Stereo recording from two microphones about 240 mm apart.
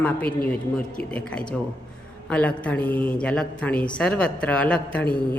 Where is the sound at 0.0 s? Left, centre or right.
Centre.